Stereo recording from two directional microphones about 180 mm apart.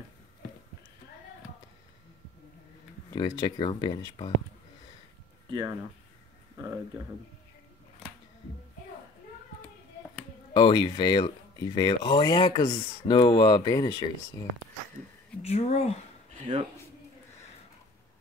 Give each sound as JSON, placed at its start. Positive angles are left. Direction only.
{"t": 3.1, "sound": "speech", "side_deg": 25}
{"t": 5.5, "sound": "speech", "side_deg": -20}
{"t": 10.5, "sound": "speech", "side_deg": 25}
{"t": 15.4, "sound": "speech", "side_deg": 35}
{"t": 16.3, "sound": "a sound", "side_deg": -30}